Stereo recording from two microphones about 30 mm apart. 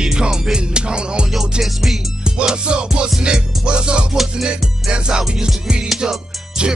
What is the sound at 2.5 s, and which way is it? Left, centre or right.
Music, right.